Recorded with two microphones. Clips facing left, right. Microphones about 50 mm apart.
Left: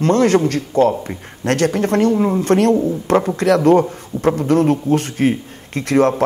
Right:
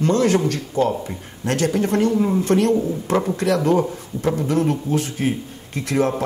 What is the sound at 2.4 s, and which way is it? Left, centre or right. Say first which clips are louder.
Speech: left 4 dB; left.